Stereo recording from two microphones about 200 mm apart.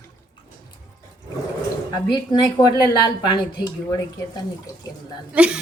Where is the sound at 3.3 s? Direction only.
20° left (ahead or behind).